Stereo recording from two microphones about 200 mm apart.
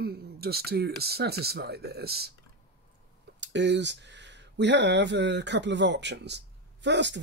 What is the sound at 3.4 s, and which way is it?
Speech, 60° right (ahead or behind).